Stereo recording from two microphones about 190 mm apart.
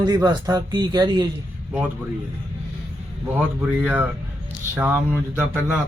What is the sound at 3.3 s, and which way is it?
Speech, 10° right (ahead or behind).